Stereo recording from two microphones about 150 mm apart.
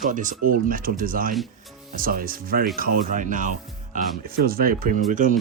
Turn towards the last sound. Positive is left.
turn(degrees=-60)  # may be behind; listen again after turning